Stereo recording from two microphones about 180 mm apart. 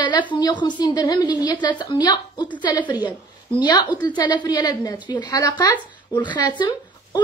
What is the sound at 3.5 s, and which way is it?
A woman's voice, 25° left (ahead or behind).